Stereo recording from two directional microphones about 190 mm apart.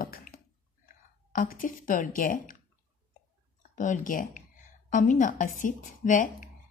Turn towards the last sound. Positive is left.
turn(degrees=45)  # may be behind; listen again after turning